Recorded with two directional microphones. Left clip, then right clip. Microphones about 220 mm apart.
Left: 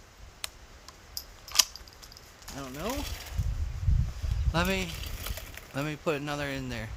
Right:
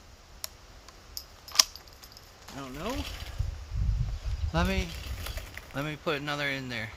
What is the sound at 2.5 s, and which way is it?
Speech, 10° left (ahead or behind).